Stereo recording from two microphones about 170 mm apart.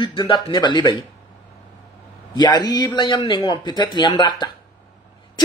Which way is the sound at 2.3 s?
25° left (ahead or behind).